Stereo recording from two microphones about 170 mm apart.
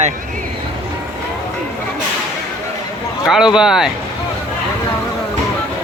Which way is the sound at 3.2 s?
Centre (ahead or behind).